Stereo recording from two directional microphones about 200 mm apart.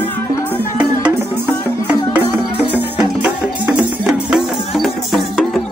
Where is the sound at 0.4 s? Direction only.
5° right (ahead or behind).